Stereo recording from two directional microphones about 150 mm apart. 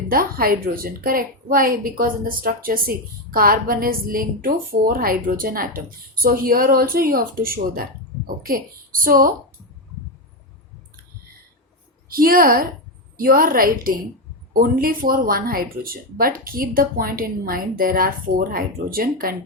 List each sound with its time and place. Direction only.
0.1 s a woman's voice: 75° right (ahead or behind)
12.1 s a woman's voice: 75° right (ahead or behind)